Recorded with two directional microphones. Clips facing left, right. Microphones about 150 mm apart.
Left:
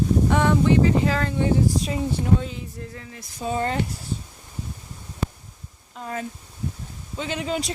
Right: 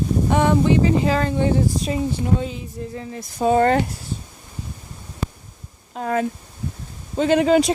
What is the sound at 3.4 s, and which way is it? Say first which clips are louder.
Speech: right 9 dB; 65° right (ahead or behind).